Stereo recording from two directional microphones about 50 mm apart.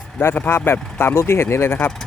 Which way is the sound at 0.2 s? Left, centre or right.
Left.